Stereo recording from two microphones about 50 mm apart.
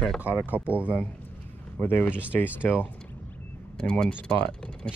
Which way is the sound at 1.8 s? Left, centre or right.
Left.